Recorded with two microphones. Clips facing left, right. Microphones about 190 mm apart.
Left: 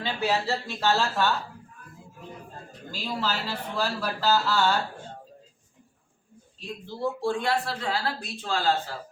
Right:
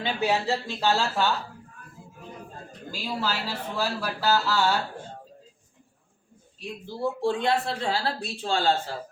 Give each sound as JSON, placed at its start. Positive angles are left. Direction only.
{"t": 0.0, "sound": "a man's voice", "side_deg": -20}
{"t": 2.9, "sound": "a man's voice", "side_deg": -10}
{"t": 6.8, "sound": "speech", "side_deg": -15}